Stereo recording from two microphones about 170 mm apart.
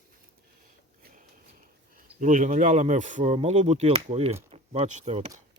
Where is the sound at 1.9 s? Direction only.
50° right (ahead or behind).